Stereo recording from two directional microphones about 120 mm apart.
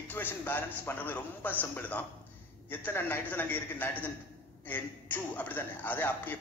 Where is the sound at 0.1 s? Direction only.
15° left (ahead or behind).